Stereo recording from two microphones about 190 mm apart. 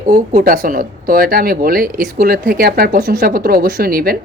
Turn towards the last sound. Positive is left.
turn(degrees=-50)  # may be behind; listen again after turning